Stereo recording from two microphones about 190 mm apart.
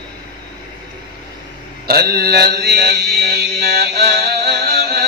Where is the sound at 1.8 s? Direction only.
55° right (ahead or behind).